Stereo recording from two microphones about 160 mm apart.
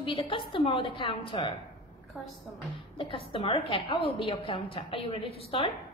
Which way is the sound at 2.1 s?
5° right (ahead or behind).